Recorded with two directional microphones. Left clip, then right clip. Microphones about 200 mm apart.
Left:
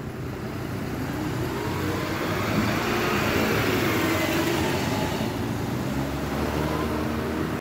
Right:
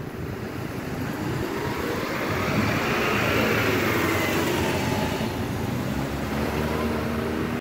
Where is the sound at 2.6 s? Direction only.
50° left (ahead or behind).